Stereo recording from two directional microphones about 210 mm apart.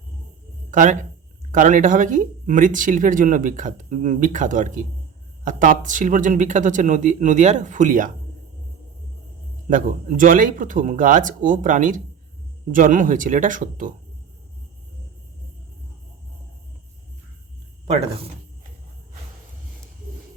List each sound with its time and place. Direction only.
0.7 s speech: 35° right (ahead or behind)
9.6 s speech: 40° right (ahead or behind)